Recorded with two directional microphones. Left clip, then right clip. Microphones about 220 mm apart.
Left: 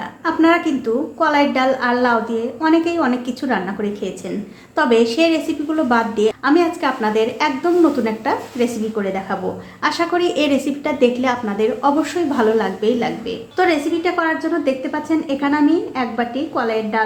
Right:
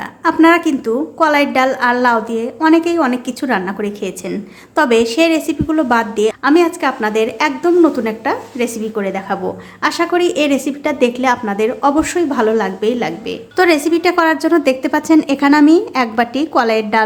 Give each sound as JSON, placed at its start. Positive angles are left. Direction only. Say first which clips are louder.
{"t": 0.3, "sound": "a woman's voice", "louder": "right 5 dB", "side_deg": -25}